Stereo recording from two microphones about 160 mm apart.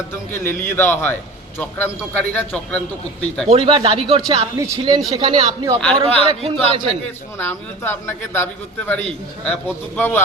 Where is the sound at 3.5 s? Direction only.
35° right (ahead or behind).